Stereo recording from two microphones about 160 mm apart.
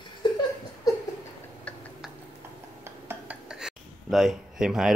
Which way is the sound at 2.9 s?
15° right (ahead or behind).